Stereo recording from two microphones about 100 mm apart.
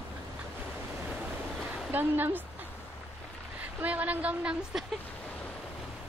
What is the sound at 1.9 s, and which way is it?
Speech, 20° right (ahead or behind).